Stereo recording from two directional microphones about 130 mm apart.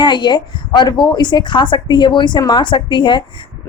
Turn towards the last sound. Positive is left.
turn(degrees=35)  # may be behind; listen again after turning